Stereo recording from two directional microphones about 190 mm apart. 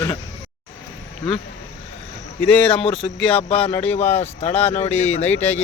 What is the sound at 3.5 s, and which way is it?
Speech, 30° left (ahead or behind).